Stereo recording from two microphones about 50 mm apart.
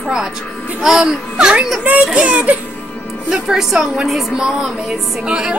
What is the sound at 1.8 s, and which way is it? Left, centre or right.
Speech, right.